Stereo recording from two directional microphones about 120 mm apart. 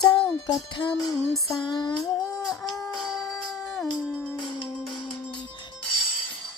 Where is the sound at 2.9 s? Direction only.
Centre (ahead or behind).